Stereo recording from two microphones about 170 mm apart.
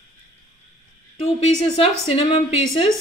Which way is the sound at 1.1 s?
35° left (ahead or behind).